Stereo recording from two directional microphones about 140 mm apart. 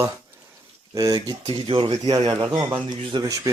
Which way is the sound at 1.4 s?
40° right (ahead or behind).